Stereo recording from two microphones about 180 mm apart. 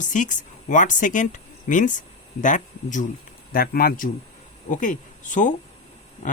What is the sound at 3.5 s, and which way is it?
Speech, 55° left (ahead or behind).